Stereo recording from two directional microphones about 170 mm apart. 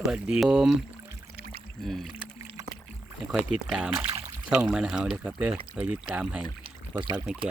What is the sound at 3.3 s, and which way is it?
Speech, centre (ahead or behind).